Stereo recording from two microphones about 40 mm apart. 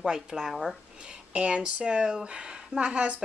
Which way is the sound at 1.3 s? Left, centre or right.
Right.